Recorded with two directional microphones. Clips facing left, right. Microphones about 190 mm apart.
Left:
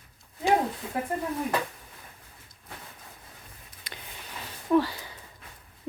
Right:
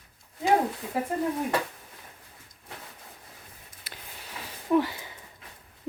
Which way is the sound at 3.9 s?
5° right (ahead or behind).